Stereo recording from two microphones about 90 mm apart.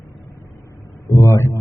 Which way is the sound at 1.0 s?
35° left (ahead or behind).